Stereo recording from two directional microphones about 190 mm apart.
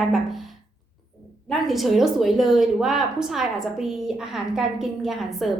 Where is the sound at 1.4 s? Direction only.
Centre (ahead or behind).